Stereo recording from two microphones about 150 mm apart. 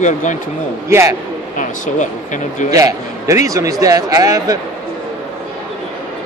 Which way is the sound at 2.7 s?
25° right (ahead or behind).